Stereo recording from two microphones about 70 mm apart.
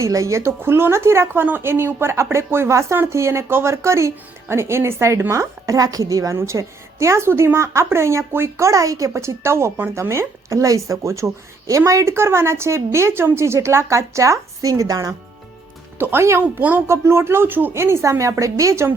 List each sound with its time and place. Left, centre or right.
0.0 s a woman's voice: right
16.0 s a woman's voice: right
16.8 s a woman's voice: right